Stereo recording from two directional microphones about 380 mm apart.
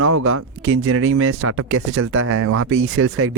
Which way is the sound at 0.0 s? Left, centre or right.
Right.